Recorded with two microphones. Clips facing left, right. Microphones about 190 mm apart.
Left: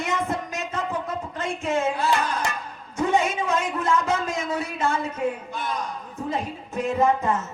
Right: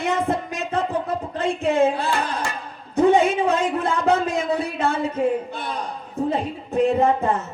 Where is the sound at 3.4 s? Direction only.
35° right (ahead or behind).